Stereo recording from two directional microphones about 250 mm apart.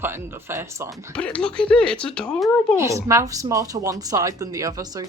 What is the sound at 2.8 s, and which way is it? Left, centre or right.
Speech, centre.